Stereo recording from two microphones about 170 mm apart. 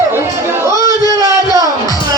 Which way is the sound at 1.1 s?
20° right (ahead or behind).